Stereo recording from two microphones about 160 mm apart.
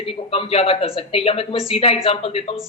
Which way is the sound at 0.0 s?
35° left (ahead or behind).